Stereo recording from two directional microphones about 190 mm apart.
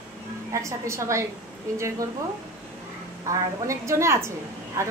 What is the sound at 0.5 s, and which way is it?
Speech, 15° right (ahead or behind).